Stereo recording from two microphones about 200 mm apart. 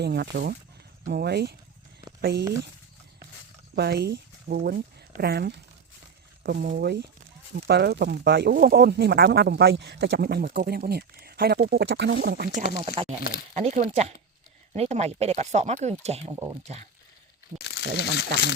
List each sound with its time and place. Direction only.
0.0 s speech: 55° right (ahead or behind)
3.8 s speech: 50° right (ahead or behind)
12.8 s speech: 30° right (ahead or behind)
16.3 s speech: 20° right (ahead or behind)
17.6 s crumpling: 55° left (ahead or behind)
17.9 s speech: 55° left (ahead or behind)